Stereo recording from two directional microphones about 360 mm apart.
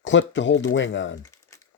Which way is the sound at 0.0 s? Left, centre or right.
Left.